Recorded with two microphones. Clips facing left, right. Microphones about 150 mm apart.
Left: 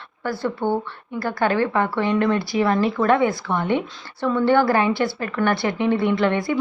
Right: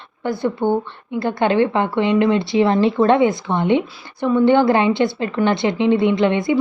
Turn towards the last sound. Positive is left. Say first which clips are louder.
# right 4 dB
turn(degrees=-20)  # may be behind; listen again after turning